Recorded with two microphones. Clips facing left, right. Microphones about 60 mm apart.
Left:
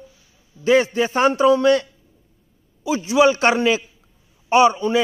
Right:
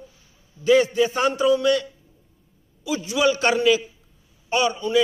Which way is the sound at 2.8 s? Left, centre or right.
Left.